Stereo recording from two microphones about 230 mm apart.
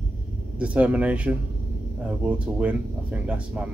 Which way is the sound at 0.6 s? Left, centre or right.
Centre.